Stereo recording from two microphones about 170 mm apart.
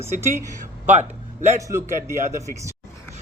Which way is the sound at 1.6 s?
15° right (ahead or behind).